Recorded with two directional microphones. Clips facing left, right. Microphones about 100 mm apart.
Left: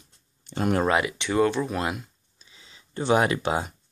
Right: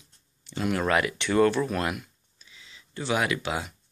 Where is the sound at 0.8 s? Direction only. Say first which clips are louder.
Left 2 dB; 20° left (ahead or behind).